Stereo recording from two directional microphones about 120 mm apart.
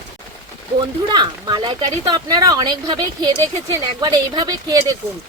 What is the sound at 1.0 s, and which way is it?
Speech, 35° right (ahead or behind).